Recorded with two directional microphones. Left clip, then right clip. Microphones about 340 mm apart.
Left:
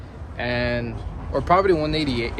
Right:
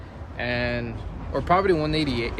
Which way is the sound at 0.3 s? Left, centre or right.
Centre.